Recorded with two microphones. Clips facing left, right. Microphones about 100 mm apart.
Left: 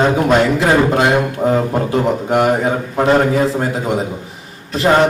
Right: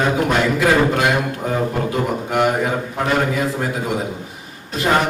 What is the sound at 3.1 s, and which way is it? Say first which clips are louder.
Speech: left 6 dB; 30° left (ahead or behind).